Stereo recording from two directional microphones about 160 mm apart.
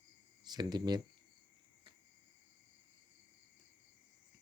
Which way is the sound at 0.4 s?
25° right (ahead or behind).